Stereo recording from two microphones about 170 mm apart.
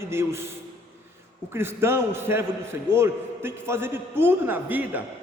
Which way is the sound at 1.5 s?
15° right (ahead or behind).